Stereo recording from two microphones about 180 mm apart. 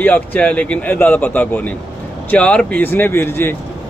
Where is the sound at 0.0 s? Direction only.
10° left (ahead or behind).